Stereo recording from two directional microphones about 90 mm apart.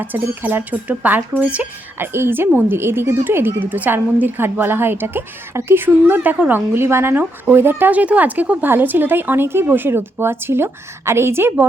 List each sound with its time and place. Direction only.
0.0 s speech: 20° right (ahead or behind)
2.1 s speech: 25° right (ahead or behind)